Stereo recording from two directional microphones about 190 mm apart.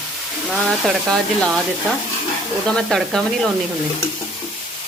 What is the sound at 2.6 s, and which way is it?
Speech, 5° left (ahead or behind).